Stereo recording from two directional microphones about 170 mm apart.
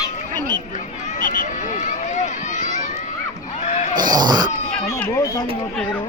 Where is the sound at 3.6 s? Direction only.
45° left (ahead or behind).